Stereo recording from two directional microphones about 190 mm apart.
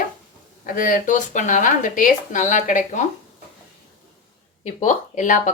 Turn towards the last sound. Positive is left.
turn(degrees=40)  # may be behind; listen again after turning